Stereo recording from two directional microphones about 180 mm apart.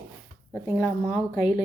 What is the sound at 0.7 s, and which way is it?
Speech, 5° right (ahead or behind).